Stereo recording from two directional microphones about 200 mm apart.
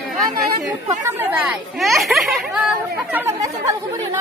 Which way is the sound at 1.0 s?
10° right (ahead or behind).